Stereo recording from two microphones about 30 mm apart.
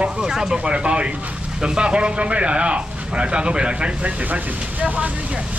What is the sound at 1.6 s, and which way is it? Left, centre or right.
A man's voice, right.